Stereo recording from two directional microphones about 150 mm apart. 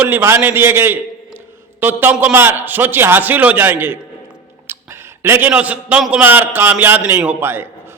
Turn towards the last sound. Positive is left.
turn(degrees=-15)  # may be behind; listen again after turning